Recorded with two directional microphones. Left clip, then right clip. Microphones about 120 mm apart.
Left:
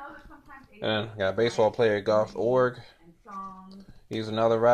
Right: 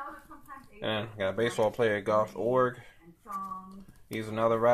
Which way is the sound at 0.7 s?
35° left (ahead or behind).